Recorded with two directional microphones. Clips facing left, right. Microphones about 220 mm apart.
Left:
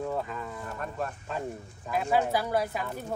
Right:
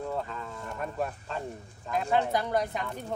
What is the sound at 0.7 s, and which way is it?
Speech, 5° right (ahead or behind).